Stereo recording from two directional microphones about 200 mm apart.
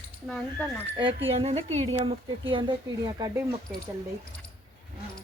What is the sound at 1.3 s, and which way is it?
A woman's voice, 30° right (ahead or behind).